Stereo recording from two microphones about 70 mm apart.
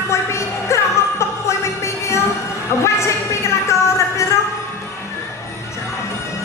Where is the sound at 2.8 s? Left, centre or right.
Left.